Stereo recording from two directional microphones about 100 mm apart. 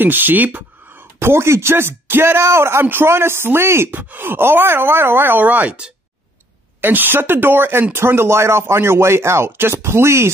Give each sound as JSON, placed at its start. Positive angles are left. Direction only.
{"t": 0.0, "sound": "a man's voice", "side_deg": -20}